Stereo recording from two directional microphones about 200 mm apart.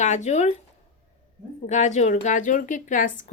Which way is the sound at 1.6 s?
35° left (ahead or behind).